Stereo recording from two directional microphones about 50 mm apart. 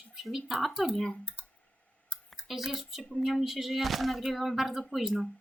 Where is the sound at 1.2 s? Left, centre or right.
Right.